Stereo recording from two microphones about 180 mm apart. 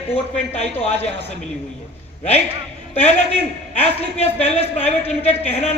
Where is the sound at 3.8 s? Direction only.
35° left (ahead or behind).